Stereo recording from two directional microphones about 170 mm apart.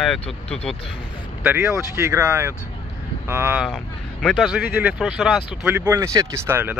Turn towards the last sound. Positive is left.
turn(degrees=-15)  # may be behind; listen again after turning